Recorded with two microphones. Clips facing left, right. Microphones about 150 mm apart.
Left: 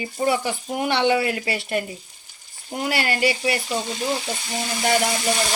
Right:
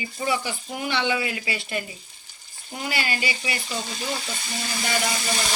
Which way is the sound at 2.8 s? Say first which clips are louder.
Left 6 dB; 65° left (ahead or behind).